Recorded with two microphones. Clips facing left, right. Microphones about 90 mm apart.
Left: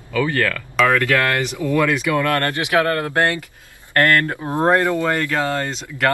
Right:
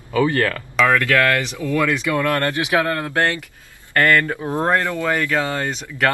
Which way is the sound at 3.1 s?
15° left (ahead or behind).